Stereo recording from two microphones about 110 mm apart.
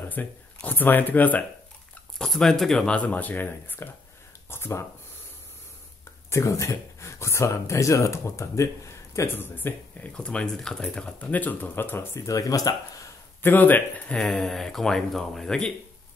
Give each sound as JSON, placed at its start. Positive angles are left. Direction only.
{"t": 0.1, "sound": "speech", "side_deg": 15}
{"t": 2.1, "sound": "speech", "side_deg": 5}
{"t": 6.3, "sound": "speech", "side_deg": 30}
{"t": 10.1, "sound": "speech", "side_deg": 10}
{"t": 13.4, "sound": "speech", "side_deg": 15}